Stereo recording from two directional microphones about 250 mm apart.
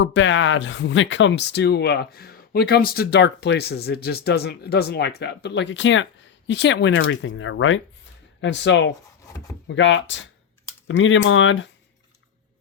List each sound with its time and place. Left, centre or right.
0.0 s speech: left